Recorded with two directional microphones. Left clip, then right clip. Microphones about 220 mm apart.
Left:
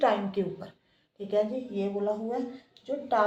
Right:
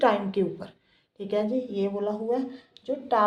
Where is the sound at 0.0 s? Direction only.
45° right (ahead or behind).